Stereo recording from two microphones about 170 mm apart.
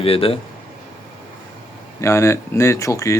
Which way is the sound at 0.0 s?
35° left (ahead or behind).